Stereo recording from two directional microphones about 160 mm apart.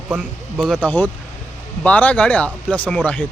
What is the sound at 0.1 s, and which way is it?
Speech, 10° right (ahead or behind).